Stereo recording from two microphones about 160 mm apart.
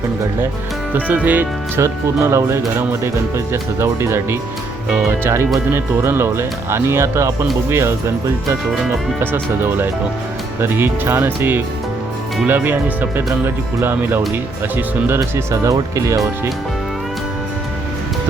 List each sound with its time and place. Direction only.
0.9 s speech: 10° right (ahead or behind)